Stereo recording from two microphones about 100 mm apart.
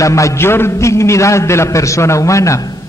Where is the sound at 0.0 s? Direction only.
30° left (ahead or behind).